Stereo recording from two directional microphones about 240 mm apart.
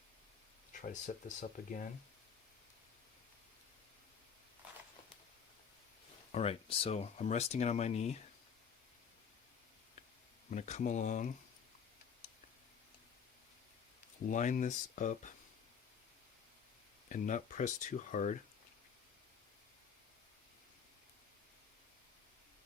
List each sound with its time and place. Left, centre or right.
0.7 s speech: left
6.3 s speech: left
10.5 s speech: left
14.3 s speech: left
17.1 s speech: left